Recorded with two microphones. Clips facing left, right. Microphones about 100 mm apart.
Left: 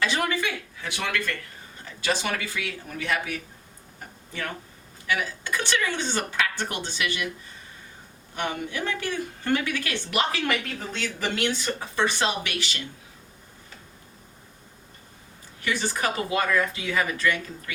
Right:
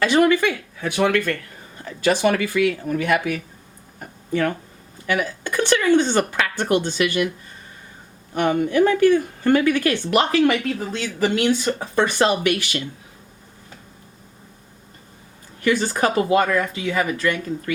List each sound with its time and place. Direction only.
0.0 s speech: 50° right (ahead or behind)
8.4 s speech: 50° right (ahead or behind)
15.6 s speech: 50° right (ahead or behind)